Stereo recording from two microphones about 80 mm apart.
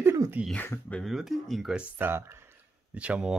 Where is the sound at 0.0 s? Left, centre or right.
Right.